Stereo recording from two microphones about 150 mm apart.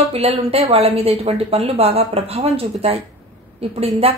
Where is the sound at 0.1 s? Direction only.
40° right (ahead or behind).